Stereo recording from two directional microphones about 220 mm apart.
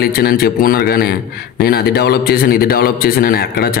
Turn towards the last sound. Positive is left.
turn(degrees=45)  # may be behind; listen again after turning